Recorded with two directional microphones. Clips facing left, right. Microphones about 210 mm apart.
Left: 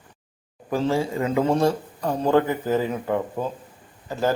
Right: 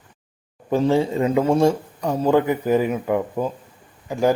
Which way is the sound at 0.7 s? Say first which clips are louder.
Right 4 dB; 25° right (ahead or behind).